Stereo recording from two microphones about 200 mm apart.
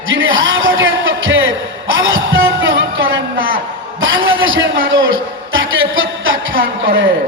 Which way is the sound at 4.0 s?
75° right (ahead or behind).